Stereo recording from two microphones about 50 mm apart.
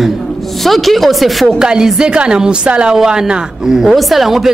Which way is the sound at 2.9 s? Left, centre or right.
Centre.